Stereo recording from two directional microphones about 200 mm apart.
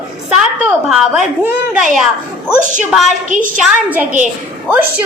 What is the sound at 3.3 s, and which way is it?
Speech, 45° right (ahead or behind).